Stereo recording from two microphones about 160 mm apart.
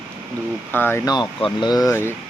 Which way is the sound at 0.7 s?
15° left (ahead or behind).